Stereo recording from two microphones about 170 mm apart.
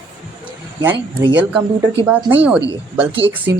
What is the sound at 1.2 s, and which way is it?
Speech, 90° right.